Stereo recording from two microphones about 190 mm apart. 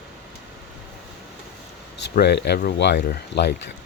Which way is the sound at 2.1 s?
60° left (ahead or behind).